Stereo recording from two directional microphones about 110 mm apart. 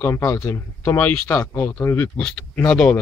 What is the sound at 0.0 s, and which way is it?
Speech, 25° left (ahead or behind).